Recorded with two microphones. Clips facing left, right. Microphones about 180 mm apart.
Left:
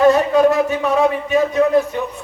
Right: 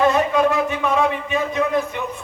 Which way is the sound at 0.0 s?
40° left (ahead or behind).